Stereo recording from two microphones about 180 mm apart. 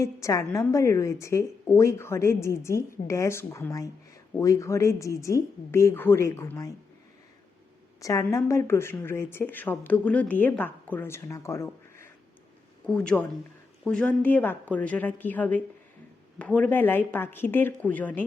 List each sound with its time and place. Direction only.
0.0 s speech: 15° left (ahead or behind)
8.0 s speech: 15° left (ahead or behind)